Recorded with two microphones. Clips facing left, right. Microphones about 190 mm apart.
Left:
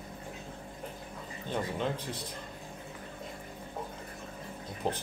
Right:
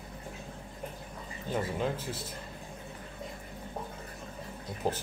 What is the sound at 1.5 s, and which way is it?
Speech, 5° right (ahead or behind).